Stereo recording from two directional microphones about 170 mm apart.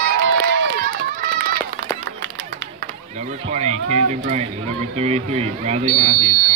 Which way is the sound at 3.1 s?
40° right (ahead or behind).